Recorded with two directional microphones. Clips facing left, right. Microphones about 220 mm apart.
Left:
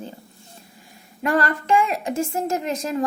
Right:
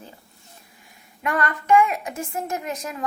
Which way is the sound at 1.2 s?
30° left (ahead or behind).